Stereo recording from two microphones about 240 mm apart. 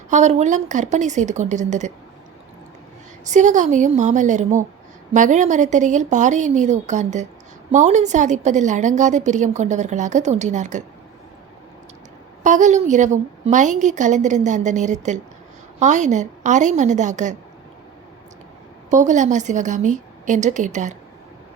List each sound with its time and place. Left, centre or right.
0.1 s a woman's voice: right
3.2 s a woman's voice: right
12.4 s a woman's voice: right
18.9 s a woman's voice: right